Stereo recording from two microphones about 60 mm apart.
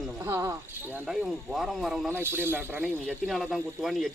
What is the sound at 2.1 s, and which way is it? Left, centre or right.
Speech, right.